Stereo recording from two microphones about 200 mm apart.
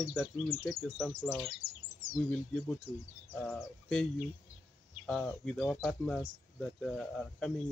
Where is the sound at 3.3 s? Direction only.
5° left (ahead or behind).